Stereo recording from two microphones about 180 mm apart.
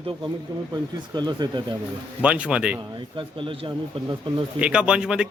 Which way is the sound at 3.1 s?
30° right (ahead or behind).